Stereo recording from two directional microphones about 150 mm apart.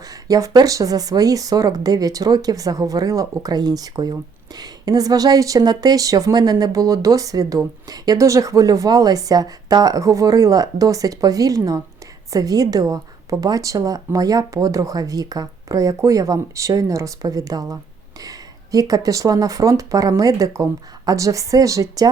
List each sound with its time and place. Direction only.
0.1 s speech: 20° right (ahead or behind)